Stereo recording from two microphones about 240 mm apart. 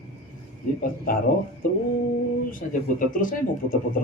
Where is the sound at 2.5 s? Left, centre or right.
Left.